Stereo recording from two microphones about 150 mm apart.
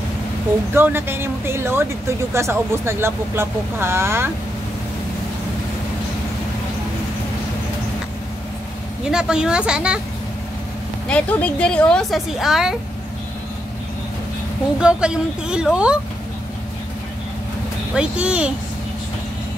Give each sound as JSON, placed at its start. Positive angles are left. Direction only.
{"t": 0.7, "sound": "speech", "side_deg": -15}
{"t": 9.0, "sound": "a woman's voice", "side_deg": -5}
{"t": 11.1, "sound": "a woman's voice", "side_deg": 10}
{"t": 14.8, "sound": "a woman's voice", "side_deg": -5}
{"t": 17.9, "sound": "speech", "side_deg": -10}